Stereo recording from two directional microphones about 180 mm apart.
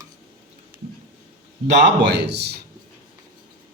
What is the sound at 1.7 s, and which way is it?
Speech, 75° right (ahead or behind).